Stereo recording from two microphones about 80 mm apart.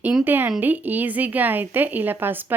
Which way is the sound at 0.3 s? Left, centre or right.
Right.